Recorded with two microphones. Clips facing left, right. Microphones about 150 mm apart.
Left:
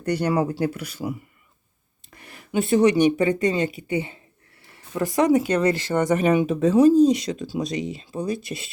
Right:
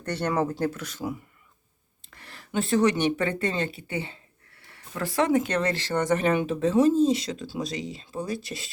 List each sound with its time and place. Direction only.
0.0 s speech: 10° left (ahead or behind)
2.1 s speech: 15° left (ahead or behind)